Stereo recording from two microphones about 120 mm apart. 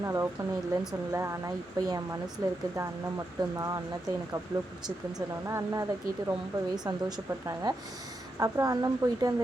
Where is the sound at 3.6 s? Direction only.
30° right (ahead or behind).